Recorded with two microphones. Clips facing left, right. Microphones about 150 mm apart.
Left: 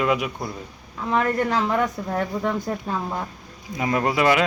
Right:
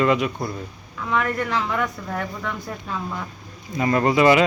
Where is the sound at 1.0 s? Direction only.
35° left (ahead or behind).